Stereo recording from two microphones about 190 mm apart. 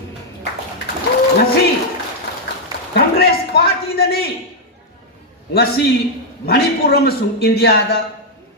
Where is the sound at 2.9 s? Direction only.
55° left (ahead or behind).